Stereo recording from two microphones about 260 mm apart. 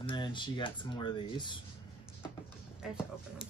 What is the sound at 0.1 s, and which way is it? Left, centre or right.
Speech, centre.